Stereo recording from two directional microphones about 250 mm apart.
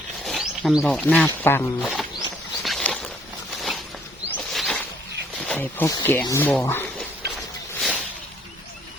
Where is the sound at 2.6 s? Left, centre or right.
Centre.